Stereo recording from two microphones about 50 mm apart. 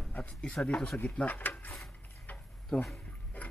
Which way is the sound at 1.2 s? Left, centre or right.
Left.